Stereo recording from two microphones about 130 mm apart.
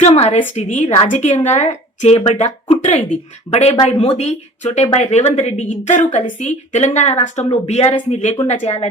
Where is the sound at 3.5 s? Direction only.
60° left (ahead or behind).